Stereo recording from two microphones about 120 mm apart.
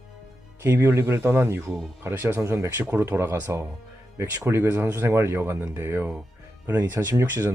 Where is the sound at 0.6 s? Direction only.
25° right (ahead or behind).